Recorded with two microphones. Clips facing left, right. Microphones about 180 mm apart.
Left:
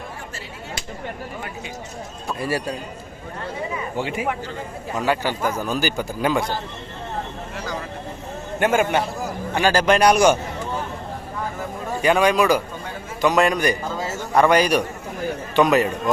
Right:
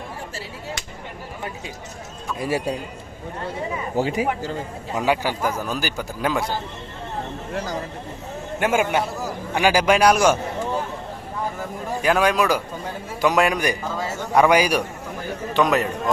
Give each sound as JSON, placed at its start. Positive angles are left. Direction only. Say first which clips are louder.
{"t": 2.4, "sound": "a man's voice", "louder": "right 1 dB", "side_deg": -20}
{"t": 3.9, "sound": "speech", "louder": "right 4 dB", "side_deg": -40}
{"t": 4.9, "sound": "a man's voice", "louder": "right 1 dB", "side_deg": -10}
{"t": 8.5, "sound": "a man's voice", "louder": "left 1 dB", "side_deg": -5}
{"t": 12.0, "sound": "a man's voice", "louder": "left 2 dB", "side_deg": 0}